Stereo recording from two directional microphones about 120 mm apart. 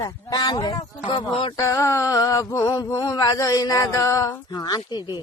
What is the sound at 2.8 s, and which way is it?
Speech, 30° left (ahead or behind).